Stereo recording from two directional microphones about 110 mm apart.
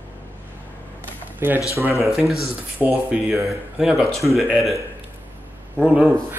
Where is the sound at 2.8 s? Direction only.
15° right (ahead or behind).